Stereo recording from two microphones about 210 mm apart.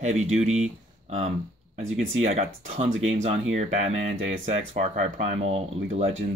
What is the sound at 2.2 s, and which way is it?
Speech, 30° right (ahead or behind).